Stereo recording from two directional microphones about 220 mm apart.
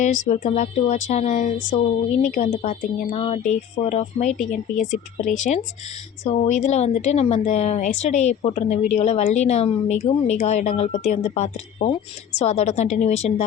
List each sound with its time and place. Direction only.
0.0 s a woman's voice: 35° left (ahead or behind)